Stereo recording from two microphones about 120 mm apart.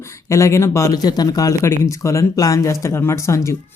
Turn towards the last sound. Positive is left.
turn(degrees=25)  # may be behind; listen again after turning